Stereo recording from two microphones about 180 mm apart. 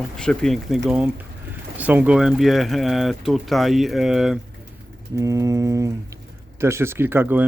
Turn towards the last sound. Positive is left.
turn(degrees=-10)  # may be behind; listen again after turning